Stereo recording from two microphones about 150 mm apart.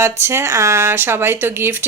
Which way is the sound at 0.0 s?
15° right (ahead or behind).